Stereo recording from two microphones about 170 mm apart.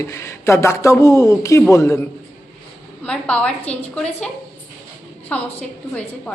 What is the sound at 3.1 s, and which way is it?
Speech, 5° left (ahead or behind).